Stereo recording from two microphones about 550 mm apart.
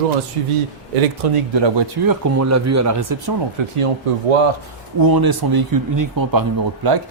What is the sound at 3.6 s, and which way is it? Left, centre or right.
Speech, right.